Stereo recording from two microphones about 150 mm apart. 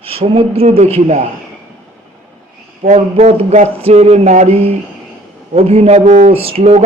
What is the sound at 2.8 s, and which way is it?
A man's voice, 45° right (ahead or behind).